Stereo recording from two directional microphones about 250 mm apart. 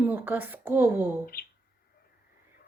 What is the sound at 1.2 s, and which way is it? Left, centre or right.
Speech, left.